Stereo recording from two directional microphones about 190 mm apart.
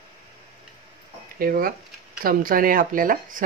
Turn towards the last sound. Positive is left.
turn(degrees=-45)  # may be behind; listen again after turning